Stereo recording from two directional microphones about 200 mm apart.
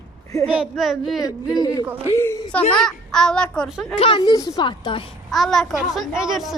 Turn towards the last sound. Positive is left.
turn(degrees=0)  # may be behind; listen again after turning